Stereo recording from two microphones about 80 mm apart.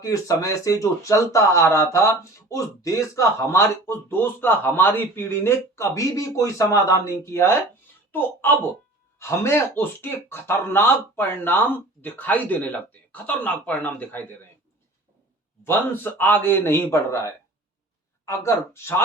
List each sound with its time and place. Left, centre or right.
0.0 s speech: left
15.6 s speech: left